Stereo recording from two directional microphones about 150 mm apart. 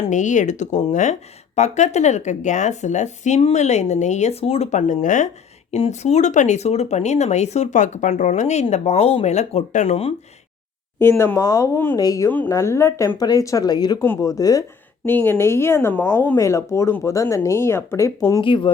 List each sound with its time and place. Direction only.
0.1 s speech: 55° left (ahead or behind)
11.0 s speech: 15° left (ahead or behind)
18.4 s speech: 35° left (ahead or behind)